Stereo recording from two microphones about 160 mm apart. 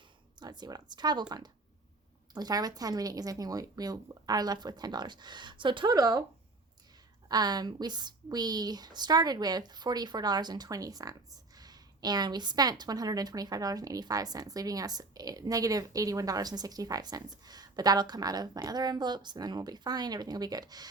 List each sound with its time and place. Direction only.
0.3 s a woman's voice: 25° right (ahead or behind)
2.3 s a woman's voice: 25° right (ahead or behind)
7.3 s a woman's voice: 25° right (ahead or behind)